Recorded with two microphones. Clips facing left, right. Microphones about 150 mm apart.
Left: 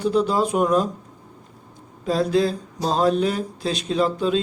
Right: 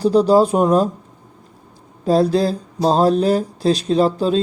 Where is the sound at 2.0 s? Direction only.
35° right (ahead or behind).